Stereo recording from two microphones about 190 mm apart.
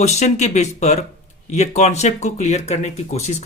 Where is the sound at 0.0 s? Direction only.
35° left (ahead or behind).